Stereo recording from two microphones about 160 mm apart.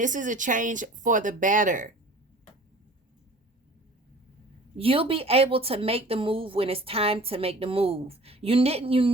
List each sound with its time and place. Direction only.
0.0 s speech: 55° right (ahead or behind)
4.8 s speech: 35° right (ahead or behind)